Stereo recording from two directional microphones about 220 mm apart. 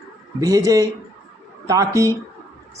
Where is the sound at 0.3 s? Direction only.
15° right (ahead or behind).